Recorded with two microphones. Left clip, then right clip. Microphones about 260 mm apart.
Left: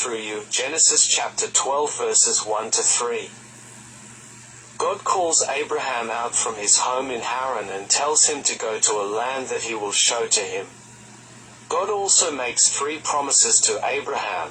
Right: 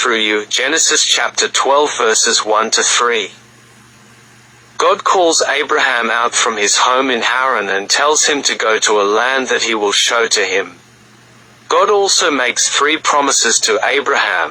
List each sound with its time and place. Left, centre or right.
0.1 s speech: right
1.4 s speech: right
4.9 s speech: right
5.9 s speech: right
8.8 s speech: right
11.7 s speech: right